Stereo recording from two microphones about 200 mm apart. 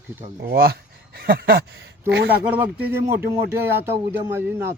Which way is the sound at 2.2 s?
10° right (ahead or behind).